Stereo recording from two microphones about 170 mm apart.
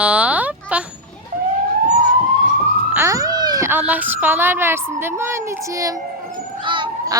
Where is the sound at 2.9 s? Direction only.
15° right (ahead or behind).